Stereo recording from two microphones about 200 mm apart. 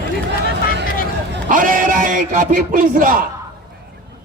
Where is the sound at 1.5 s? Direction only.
45° right (ahead or behind).